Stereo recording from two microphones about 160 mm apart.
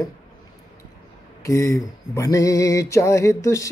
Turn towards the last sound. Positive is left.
turn(degrees=20)  # may be behind; listen again after turning